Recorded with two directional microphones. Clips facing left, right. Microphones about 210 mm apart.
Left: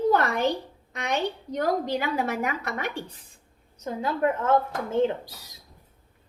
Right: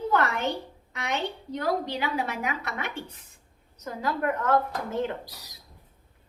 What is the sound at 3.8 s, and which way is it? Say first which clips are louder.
Speech: left 3 dB; 25° left (ahead or behind).